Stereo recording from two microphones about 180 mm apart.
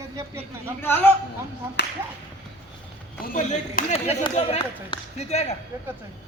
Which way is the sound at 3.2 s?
50° left (ahead or behind).